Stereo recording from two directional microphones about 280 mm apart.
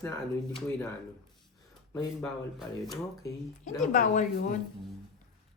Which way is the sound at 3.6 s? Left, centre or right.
Left.